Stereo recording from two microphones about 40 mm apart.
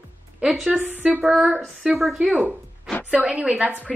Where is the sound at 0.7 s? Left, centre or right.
Right.